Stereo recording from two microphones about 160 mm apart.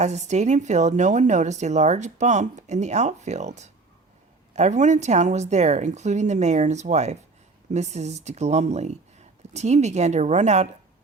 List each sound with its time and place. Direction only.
0.0 s a woman's voice: 45° right (ahead or behind)